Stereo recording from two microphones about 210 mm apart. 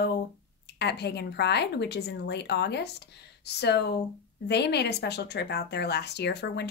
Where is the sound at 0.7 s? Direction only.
50° left (ahead or behind).